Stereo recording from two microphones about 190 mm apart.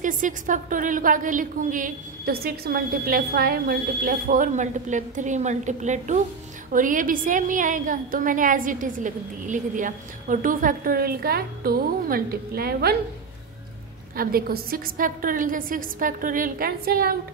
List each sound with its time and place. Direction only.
0.0 s a woman's voice: 45° right (ahead or behind)
14.1 s a woman's voice: 50° right (ahead or behind)